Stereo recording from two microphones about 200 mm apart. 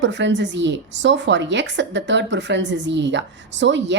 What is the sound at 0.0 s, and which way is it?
A woman's voice, 65° right (ahead or behind).